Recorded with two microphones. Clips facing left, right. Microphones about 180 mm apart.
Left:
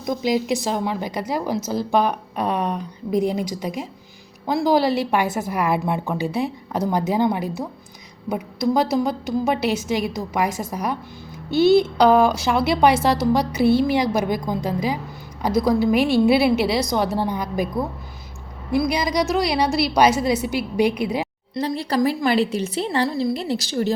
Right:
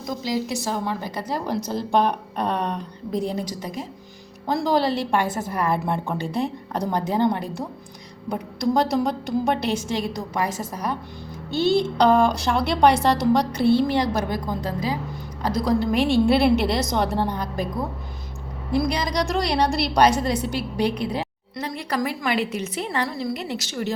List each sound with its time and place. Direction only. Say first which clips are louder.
0.0 s a woman's voice: left 4 dB; 20° left (ahead or behind)
18.7 s a woman's voice: left 2 dB; 10° left (ahead or behind)
21.5 s a woman's voice: left 5 dB; 30° left (ahead or behind)